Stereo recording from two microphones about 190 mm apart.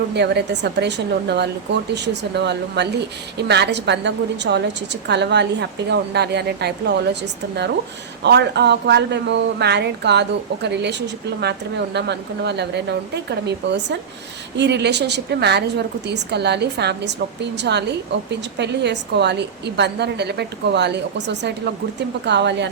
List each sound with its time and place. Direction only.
0.1 s a woman's voice: 60° right (ahead or behind)